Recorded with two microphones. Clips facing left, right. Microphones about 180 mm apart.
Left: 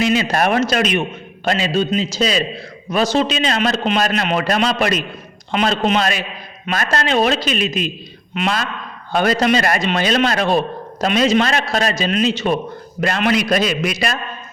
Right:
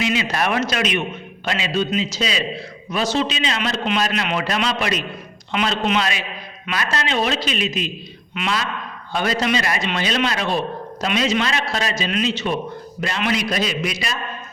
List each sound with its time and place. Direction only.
0.0 s a man's voice: 45° left (ahead or behind)
13.0 s a man's voice: 55° left (ahead or behind)